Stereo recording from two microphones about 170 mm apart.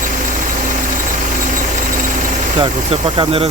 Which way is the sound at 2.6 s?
30° right (ahead or behind).